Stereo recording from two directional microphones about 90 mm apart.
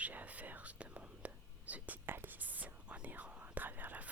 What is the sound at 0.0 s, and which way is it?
Whispering, 15° right (ahead or behind).